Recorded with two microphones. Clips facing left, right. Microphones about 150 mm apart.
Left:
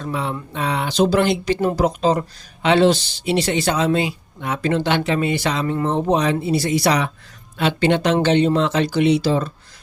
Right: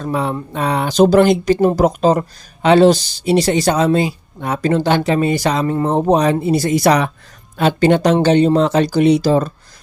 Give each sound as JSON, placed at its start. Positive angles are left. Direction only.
{"t": 0.0, "sound": "speech", "side_deg": -45}